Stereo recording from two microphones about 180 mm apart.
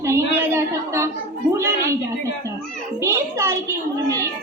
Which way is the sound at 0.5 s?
15° right (ahead or behind).